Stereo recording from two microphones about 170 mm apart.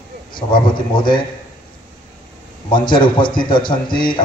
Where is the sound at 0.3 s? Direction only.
30° left (ahead or behind).